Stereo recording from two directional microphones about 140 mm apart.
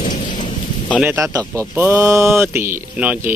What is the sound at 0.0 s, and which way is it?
Rain, 65° left (ahead or behind).